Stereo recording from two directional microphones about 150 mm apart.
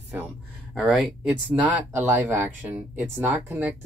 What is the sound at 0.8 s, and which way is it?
Speech, centre (ahead or behind).